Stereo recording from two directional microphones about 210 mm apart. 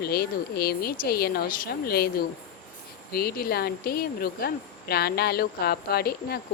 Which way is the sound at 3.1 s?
45° left (ahead or behind).